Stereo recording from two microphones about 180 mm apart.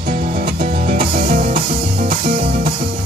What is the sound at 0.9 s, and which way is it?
Music, 50° right (ahead or behind).